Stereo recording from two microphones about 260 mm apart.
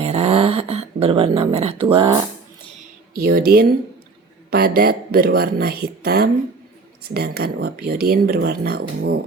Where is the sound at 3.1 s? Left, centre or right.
Right.